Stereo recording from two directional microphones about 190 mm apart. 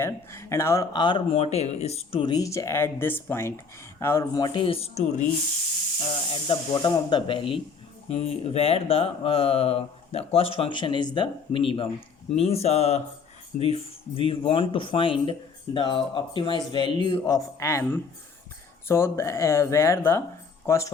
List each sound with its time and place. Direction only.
0.0 s speech: 15° left (ahead or behind); by 5.2 s 35° left (ahead or behind)
6.3 s speech: 25° left (ahead or behind)